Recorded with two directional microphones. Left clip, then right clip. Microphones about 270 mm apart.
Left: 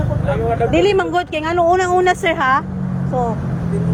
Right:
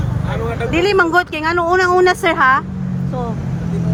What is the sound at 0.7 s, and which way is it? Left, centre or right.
Speech, centre.